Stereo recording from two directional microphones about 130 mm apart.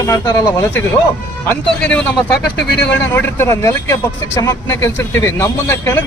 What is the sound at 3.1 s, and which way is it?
Speech, 20° left (ahead or behind).